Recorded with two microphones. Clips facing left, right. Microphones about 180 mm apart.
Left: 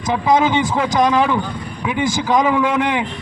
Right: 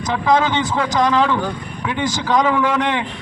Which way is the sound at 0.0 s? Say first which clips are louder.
Left 1 dB; 15° left (ahead or behind).